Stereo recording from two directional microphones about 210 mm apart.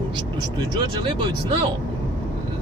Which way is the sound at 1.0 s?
25° right (ahead or behind).